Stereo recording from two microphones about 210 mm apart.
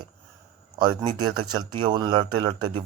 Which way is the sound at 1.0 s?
20° right (ahead or behind).